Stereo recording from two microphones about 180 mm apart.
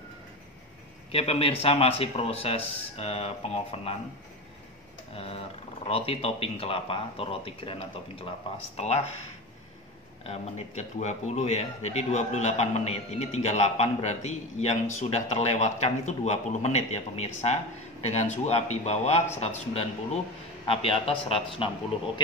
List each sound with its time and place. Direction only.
1.1 s a man's voice: 35° left (ahead or behind)
5.1 s a man's voice: 35° left (ahead or behind)
10.2 s a man's voice: 35° left (ahead or behind)